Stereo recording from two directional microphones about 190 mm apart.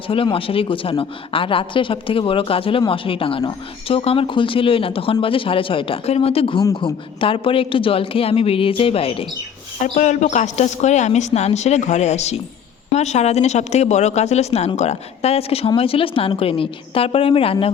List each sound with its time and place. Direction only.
0.1 s speech: 30° left (ahead or behind)